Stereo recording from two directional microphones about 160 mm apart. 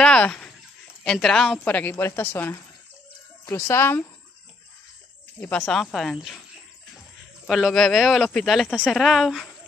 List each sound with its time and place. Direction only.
0.0 s dog: 5° left (ahead or behind)
1.0 s a woman's voice: 5° left (ahead or behind)
5.4 s speech: 10° left (ahead or behind)
7.4 s speech: centre (ahead or behind)